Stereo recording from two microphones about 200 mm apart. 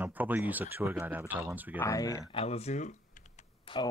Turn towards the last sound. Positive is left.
turn(degrees=25)  # may be behind; listen again after turning